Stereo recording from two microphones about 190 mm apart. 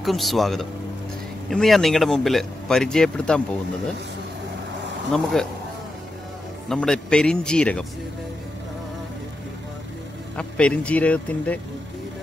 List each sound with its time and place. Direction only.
0.0 s speech: centre (ahead or behind)
5.1 s speech: 5° left (ahead or behind)
6.7 s speech: 5° left (ahead or behind)
10.3 s speech: 5° left (ahead or behind)